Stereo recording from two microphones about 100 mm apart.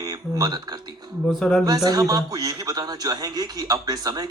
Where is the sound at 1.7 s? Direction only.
40° right (ahead or behind).